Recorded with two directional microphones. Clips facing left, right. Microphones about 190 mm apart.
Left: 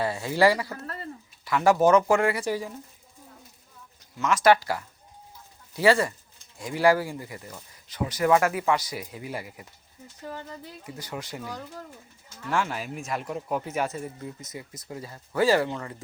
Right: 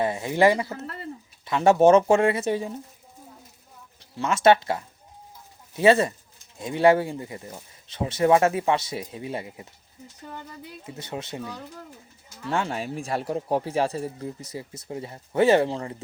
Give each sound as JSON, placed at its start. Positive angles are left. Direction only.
{"t": 0.0, "sound": "speech", "side_deg": -20}
{"t": 4.0, "sound": "speech", "side_deg": -30}
{"t": 10.8, "sound": "speech", "side_deg": -25}